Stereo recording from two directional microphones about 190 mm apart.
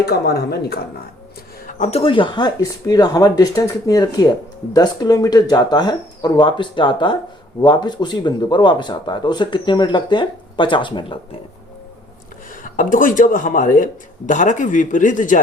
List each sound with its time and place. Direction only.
0.0 s speech: 60° left (ahead or behind)
1.6 s speech: 35° left (ahead or behind)
12.6 s speech: 45° left (ahead or behind)